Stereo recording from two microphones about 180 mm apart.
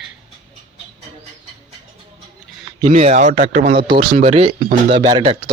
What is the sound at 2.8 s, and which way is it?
Speech, 35° right (ahead or behind).